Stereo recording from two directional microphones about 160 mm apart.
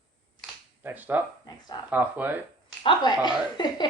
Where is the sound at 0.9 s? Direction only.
10° right (ahead or behind).